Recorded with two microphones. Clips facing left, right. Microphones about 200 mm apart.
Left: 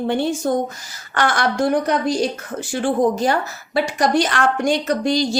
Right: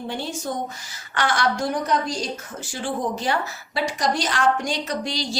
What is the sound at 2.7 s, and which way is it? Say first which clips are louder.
Speech: left 9 dB; 50° left (ahead or behind).